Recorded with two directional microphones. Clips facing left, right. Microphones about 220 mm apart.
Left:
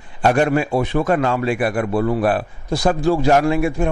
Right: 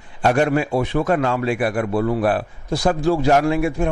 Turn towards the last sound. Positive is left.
turn(degrees=15)  # may be behind; listen again after turning